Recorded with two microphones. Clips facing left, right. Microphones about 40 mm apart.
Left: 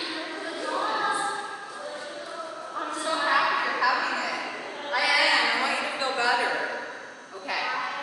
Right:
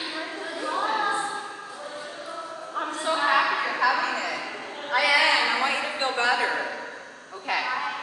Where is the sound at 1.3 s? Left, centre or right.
Centre.